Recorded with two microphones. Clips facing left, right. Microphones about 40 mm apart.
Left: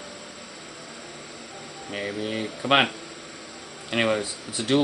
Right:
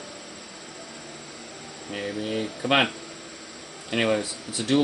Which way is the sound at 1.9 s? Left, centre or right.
Centre.